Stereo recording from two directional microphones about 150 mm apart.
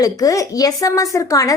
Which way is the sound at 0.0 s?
25° left (ahead or behind).